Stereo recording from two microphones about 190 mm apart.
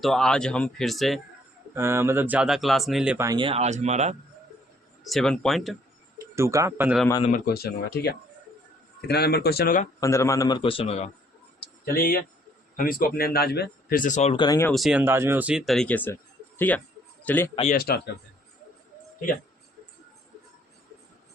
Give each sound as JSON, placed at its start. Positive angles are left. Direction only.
{"t": 0.0, "sound": "speech", "side_deg": 0}
{"t": 1.7, "sound": "speech", "side_deg": -15}
{"t": 3.2, "sound": "speech", "side_deg": -25}
{"t": 5.0, "sound": "speech", "side_deg": 0}
{"t": 6.3, "sound": "speech", "side_deg": -15}
{"t": 7.2, "sound": "speech", "side_deg": 40}
{"t": 7.4, "sound": "speech", "side_deg": 55}
{"t": 10.0, "sound": "a man's voice", "side_deg": 15}
{"t": 11.6, "sound": "a sound", "side_deg": 50}
{"t": 12.7, "sound": "speech", "side_deg": 50}
{"t": 14.4, "sound": "a man's voice", "side_deg": 20}
{"t": 14.7, "sound": "a man's voice", "side_deg": 0}
{"t": 17.7, "sound": "speech", "side_deg": 55}